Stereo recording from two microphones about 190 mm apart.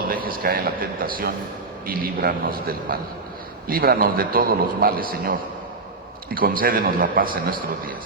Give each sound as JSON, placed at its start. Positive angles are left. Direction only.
{"t": 0.1, "sound": "a man's voice", "side_deg": -50}